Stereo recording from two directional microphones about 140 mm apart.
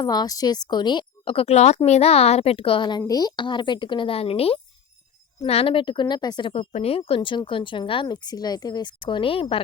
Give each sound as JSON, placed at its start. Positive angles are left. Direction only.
{"t": 0.0, "sound": "a woman's voice", "side_deg": 30}
{"t": 6.5, "sound": "a woman's voice", "side_deg": 45}